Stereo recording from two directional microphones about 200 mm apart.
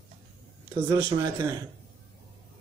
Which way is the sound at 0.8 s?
20° right (ahead or behind).